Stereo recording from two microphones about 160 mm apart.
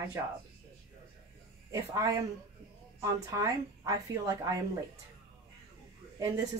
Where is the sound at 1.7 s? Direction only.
20° right (ahead or behind).